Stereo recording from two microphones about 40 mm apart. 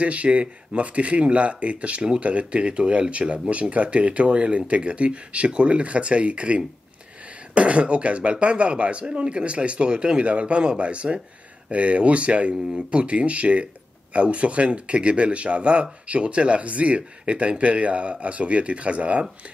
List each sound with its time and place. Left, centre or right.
0.0 s speech: right